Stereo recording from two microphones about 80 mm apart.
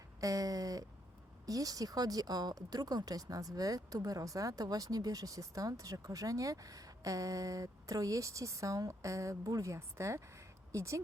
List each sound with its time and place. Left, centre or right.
0.2 s speech: right